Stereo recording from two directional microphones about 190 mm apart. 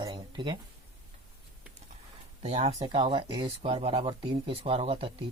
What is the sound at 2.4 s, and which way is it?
Speech, 30° right (ahead or behind).